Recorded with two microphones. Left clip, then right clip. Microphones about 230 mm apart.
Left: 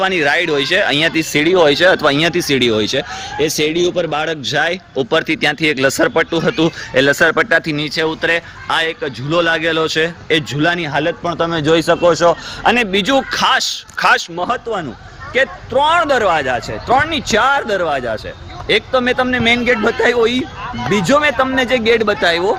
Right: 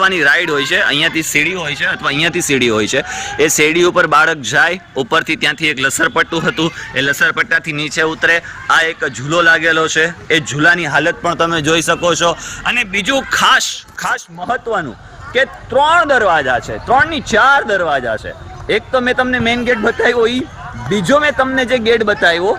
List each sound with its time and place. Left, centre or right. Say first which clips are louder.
0.0 s speech: right 3 dB; centre
1.5 s a man's voice: left 7 dB; left; by 13.7 s centre
14.0 s speech: left 6 dB; left
14.5 s a man's voice: right 2 dB; centre